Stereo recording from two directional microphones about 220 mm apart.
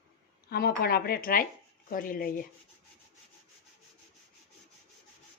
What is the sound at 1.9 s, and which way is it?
Rub, 40° left (ahead or behind).